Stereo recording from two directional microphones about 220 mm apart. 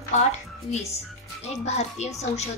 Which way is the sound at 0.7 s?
30° left (ahead or behind).